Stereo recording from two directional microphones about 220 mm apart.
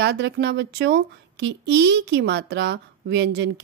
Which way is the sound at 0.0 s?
50° right (ahead or behind).